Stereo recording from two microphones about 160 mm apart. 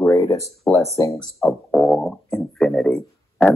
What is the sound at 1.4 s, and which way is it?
Speech, centre (ahead or behind).